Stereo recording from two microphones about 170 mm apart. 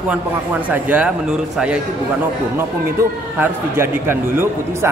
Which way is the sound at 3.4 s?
15° right (ahead or behind).